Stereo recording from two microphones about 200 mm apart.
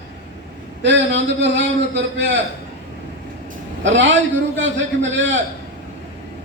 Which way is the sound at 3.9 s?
65° right (ahead or behind).